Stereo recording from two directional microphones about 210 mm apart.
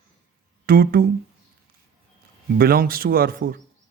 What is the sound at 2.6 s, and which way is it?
Speech, 45° right (ahead or behind).